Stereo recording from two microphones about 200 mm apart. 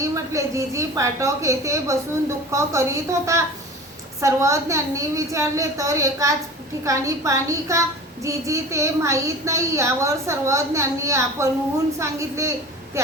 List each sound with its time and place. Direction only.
0.0 s a woman's voice: 15° right (ahead or behind)